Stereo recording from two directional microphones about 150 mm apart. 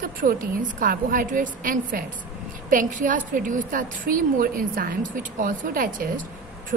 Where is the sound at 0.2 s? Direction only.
70° right (ahead or behind).